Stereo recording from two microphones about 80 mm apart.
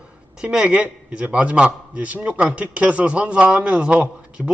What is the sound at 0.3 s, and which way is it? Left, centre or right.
A man's voice, centre.